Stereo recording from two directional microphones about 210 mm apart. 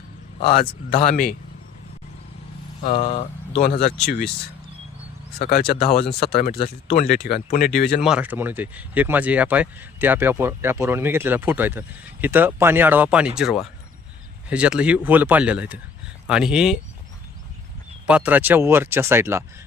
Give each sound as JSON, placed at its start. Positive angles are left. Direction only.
{"t": 0.9, "sound": "speech", "side_deg": 35}
{"t": 2.8, "sound": "speech", "side_deg": 35}
{"t": 4.0, "sound": "speech", "side_deg": 50}
{"t": 5.4, "sound": "speech", "side_deg": 45}
{"t": 5.8, "sound": "speech", "side_deg": 30}
{"t": 6.2, "sound": "speech", "side_deg": 45}
{"t": 6.6, "sound": "speech", "side_deg": 30}
{"t": 7.0, "sound": "speech", "side_deg": 50}
{"t": 8.0, "sound": "speech", "side_deg": -5}
{"t": 18.0, "sound": "speech", "side_deg": -5}